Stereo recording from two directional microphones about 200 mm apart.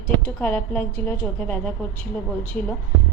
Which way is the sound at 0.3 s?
10° left (ahead or behind).